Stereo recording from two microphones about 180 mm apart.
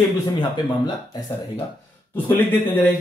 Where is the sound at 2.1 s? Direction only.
10° left (ahead or behind).